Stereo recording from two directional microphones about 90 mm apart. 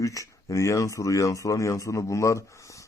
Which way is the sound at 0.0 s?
35° left (ahead or behind).